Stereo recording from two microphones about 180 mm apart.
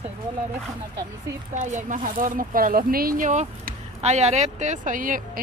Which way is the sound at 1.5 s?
45° right (ahead or behind).